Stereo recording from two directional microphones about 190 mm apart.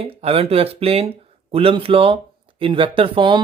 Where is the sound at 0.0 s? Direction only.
30° right (ahead or behind).